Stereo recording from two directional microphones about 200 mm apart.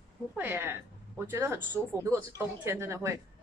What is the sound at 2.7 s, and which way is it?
Speech, 15° right (ahead or behind).